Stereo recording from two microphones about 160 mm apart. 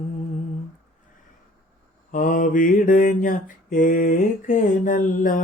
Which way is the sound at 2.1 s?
55° left (ahead or behind).